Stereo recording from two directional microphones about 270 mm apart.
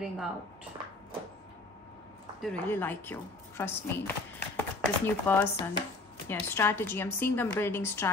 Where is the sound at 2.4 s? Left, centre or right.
Centre.